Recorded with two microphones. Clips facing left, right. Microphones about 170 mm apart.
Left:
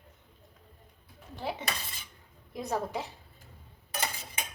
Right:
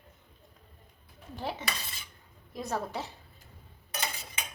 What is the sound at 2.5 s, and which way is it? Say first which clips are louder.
Speech: left 1 dB; 15° left (ahead or behind).